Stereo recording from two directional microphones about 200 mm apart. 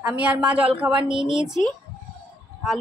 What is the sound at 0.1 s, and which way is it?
A woman's voice, 5° right (ahead or behind).